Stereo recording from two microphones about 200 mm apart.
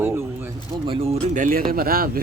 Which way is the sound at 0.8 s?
30° right (ahead or behind).